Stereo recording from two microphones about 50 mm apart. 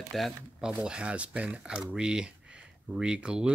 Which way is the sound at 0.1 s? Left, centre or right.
Centre.